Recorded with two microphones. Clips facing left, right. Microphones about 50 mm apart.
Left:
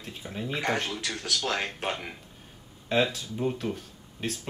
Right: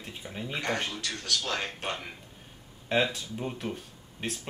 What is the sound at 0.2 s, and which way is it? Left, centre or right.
Speech, centre.